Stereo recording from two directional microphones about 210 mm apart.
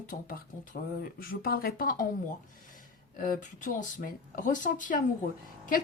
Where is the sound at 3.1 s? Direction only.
40° left (ahead or behind).